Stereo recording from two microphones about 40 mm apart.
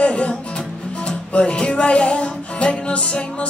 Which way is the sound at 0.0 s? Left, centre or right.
Left.